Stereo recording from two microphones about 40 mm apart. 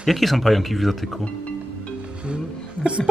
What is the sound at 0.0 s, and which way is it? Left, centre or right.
Speech, centre.